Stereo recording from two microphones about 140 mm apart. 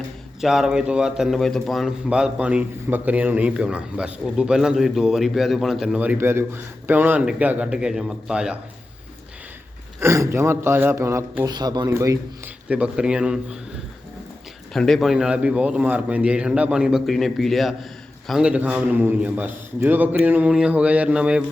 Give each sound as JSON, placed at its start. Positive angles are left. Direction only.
{"t": 0.4, "sound": "a man's voice", "side_deg": -5}
{"t": 10.0, "sound": "speech", "side_deg": -20}
{"t": 11.5, "sound": "speech", "side_deg": -30}
{"t": 12.6, "sound": "a man's voice", "side_deg": -10}
{"t": 14.7, "sound": "a man's voice", "side_deg": 0}